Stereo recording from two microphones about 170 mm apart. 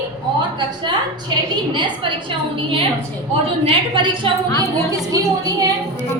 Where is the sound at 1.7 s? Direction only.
30° right (ahead or behind).